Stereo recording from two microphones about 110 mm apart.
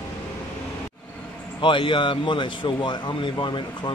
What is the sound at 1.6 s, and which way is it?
A man's voice, 50° left (ahead or behind).